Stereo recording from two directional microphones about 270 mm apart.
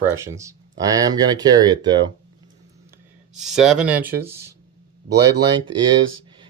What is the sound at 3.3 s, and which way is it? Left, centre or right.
Speech, centre.